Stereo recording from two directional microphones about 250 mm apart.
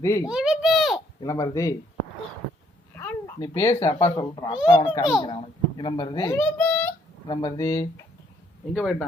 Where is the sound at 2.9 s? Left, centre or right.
Centre.